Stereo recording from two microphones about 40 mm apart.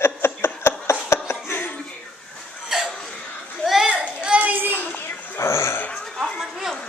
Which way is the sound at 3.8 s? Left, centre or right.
Right.